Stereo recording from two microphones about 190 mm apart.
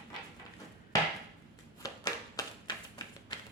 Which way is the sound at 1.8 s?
20° left (ahead or behind).